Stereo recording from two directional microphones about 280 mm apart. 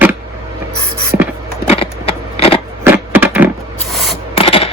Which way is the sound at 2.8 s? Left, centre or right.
Centre.